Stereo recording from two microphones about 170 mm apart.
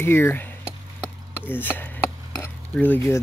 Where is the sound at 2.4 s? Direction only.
10° left (ahead or behind).